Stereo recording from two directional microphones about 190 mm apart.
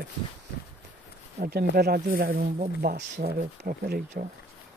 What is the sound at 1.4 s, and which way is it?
Speech, 55° right (ahead or behind).